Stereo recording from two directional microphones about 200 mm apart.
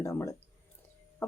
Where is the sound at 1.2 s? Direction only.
10° left (ahead or behind).